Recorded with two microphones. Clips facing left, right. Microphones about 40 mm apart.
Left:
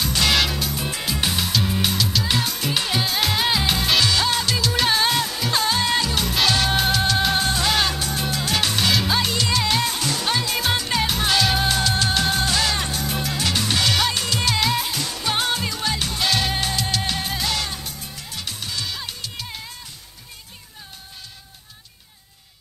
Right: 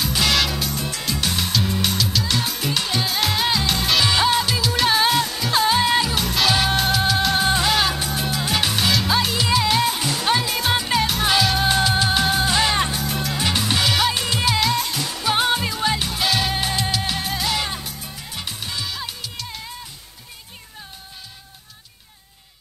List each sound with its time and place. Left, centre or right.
0.0 s music: centre
2.7 s music: centre
4.0 s music: centre
11.6 s music: centre
12.5 s music: centre
13.0 s music: centre
13.4 s music: centre
14.7 s music: centre
15.0 s music: centre
18.3 s music: centre